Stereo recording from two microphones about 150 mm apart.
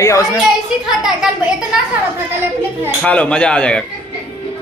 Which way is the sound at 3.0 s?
10° left (ahead or behind).